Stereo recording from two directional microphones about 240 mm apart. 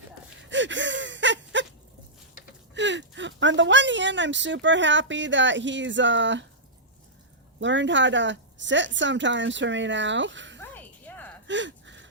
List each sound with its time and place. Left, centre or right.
0.5 s gasp: right
2.7 s speech: right
7.6 s speech: right
10.6 s a sound: centre
11.4 s gasp: right